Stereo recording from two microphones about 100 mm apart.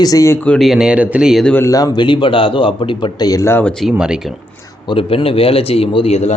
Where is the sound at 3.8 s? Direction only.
10° right (ahead or behind).